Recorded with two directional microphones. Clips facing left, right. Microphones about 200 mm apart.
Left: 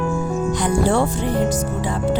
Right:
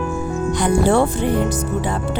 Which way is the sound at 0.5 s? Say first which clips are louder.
Right 3 dB; 65° right (ahead or behind).